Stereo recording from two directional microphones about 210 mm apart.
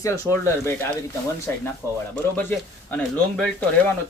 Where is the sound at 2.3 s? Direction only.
10° left (ahead or behind).